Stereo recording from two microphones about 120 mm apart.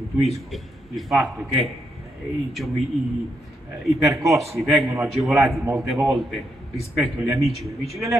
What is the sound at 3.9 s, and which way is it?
Speech, 25° right (ahead or behind).